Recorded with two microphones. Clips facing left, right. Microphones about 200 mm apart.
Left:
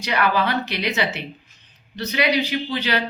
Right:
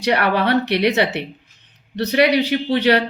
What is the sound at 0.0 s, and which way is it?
Speech, 65° right (ahead or behind).